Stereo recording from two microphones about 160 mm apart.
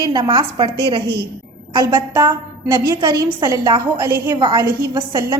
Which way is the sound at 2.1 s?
15° right (ahead or behind).